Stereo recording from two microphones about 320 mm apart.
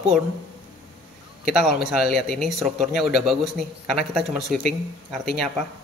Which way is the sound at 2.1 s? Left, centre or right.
Left.